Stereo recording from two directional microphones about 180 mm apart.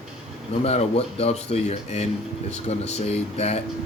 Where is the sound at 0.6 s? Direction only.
35° left (ahead or behind).